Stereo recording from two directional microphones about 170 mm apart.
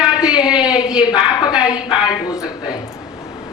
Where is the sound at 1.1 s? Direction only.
25° left (ahead or behind).